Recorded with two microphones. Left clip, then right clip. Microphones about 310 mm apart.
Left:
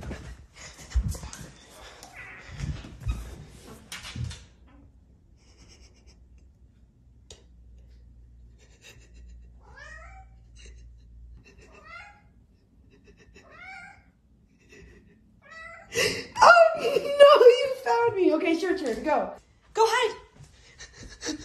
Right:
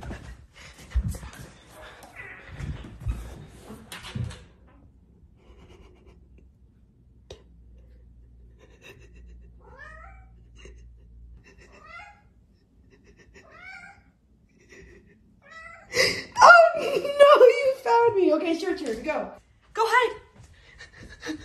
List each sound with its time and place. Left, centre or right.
8.5 s writing: right
11.4 s goat: centre
13.0 s cat: centre
19.1 s speech: centre
19.7 s a sound: centre
20.5 s pant: centre